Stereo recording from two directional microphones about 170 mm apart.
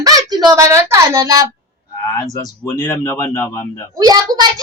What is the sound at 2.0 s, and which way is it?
A man's voice, 20° left (ahead or behind).